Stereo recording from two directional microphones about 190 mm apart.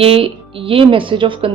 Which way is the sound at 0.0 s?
30° right (ahead or behind).